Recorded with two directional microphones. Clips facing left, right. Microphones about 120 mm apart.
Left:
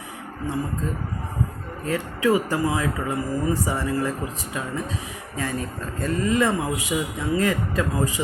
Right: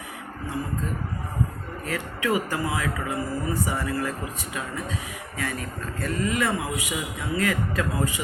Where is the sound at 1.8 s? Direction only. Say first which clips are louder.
Left 6 dB; 30° left (ahead or behind).